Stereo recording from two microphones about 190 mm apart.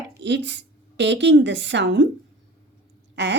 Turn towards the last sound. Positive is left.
turn(degrees=-70)  # may be behind; listen again after turning